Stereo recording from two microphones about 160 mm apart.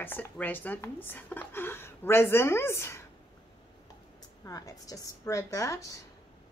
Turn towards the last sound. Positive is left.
turn(degrees=20)  # may be behind; listen again after turning